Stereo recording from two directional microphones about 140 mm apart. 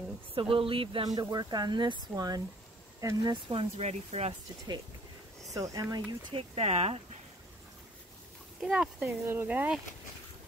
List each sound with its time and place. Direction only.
0.3 s speech: 40° right (ahead or behind)
1.0 s speech: 25° right (ahead or behind)
3.4 s speech: 45° right (ahead or behind)
4.3 s speech: 35° right (ahead or behind)
6.3 s speech: 45° right (ahead or behind)
8.5 s speech: centre (ahead or behind)
9.2 s speech: 15° right (ahead or behind)